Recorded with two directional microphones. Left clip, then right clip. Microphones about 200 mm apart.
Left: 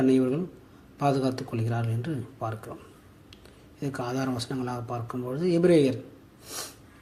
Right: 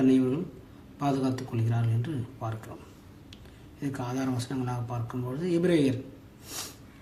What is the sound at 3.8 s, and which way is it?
A man's voice, 25° left (ahead or behind).